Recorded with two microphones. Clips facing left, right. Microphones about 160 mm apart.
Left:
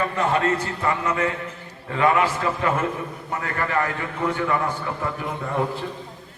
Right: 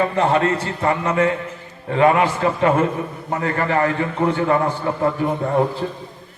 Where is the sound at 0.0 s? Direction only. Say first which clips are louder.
Right 5 dB; 30° right (ahead or behind).